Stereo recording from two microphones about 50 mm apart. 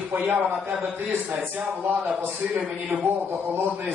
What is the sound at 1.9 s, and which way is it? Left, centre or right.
Speech, right.